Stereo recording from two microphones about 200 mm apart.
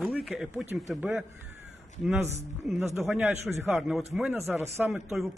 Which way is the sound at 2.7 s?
Centre (ahead or behind).